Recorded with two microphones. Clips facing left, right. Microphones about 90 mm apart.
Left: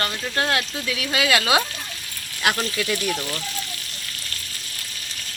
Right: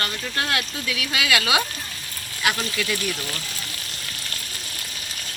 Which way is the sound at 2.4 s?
45° left (ahead or behind).